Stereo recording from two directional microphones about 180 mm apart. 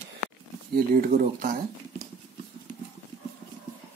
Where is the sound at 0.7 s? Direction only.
50° right (ahead or behind).